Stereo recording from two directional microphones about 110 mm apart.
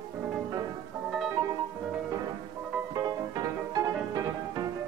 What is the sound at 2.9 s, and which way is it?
Music, 35° right (ahead or behind).